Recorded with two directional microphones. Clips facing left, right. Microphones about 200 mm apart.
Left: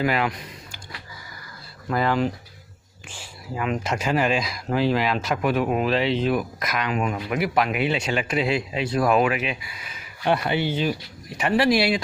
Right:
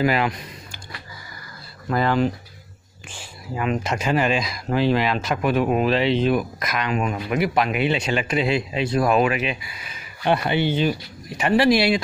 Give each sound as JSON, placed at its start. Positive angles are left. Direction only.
{"t": 0.0, "sound": "speech", "side_deg": -5}
{"t": 1.9, "sound": "speech", "side_deg": 10}
{"t": 3.5, "sound": "speech", "side_deg": 5}